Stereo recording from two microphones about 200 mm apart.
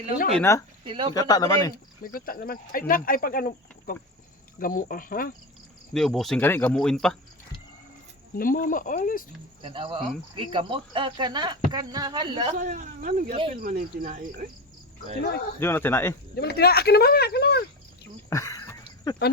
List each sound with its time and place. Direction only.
0.3 s speech: 15° left (ahead or behind)
0.9 s speech: 25° right (ahead or behind)
1.1 s speech: 20° left (ahead or behind)
2.1 s speech: 45° left (ahead or behind)
5.9 s speech: centre (ahead or behind)
8.4 s speech: 45° left (ahead or behind)
9.6 s speech: 25° right (ahead or behind)
12.5 s speech: 40° right (ahead or behind)
13.3 s speech: 25° right (ahead or behind)
13.6 s speech: 45° right (ahead or behind)
15.2 s speech: 55° left (ahead or behind)
15.6 s speech: 10° left (ahead or behind)
16.3 s speech: 55° left (ahead or behind)
18.3 s a sound: 15° left (ahead or behind)